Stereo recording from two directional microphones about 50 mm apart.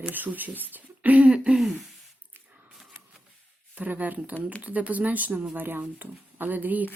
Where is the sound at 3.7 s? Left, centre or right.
Right.